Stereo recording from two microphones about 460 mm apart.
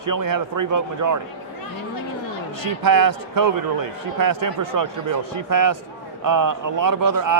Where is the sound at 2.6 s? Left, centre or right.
Right.